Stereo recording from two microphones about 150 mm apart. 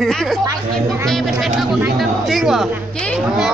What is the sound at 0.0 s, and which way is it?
Speech, 5° left (ahead or behind).